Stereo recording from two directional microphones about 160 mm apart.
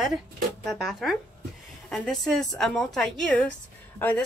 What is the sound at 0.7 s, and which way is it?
A woman's voice, centre (ahead or behind).